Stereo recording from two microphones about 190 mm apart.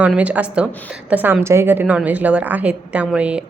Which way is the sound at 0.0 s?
5° right (ahead or behind).